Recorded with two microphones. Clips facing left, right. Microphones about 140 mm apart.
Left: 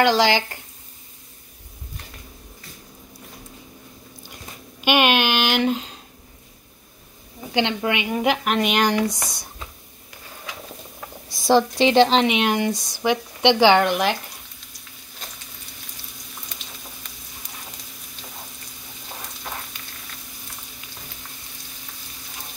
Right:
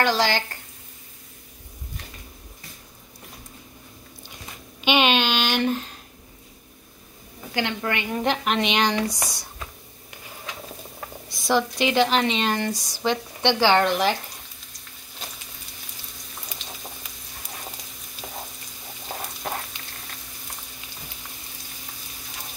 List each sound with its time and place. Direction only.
0.0 s speech: 20° left (ahead or behind)
4.8 s a woman's voice: 10° left (ahead or behind)
7.5 s a woman's voice: 20° left (ahead or behind)
11.2 s a woman's voice: 30° left (ahead or behind)
12.3 s a woman's voice: 15° left (ahead or behind)
12.7 s speech: 15° right (ahead or behind)
13.0 s a woman's voice: 15° left (ahead or behind)